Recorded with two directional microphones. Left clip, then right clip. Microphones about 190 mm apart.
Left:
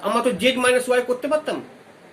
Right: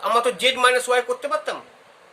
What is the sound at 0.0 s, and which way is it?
Speech, 40° right (ahead or behind).